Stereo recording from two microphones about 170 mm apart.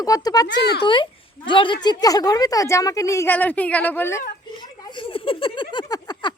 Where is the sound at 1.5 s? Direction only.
30° left (ahead or behind); by 4.2 s 15° left (ahead or behind).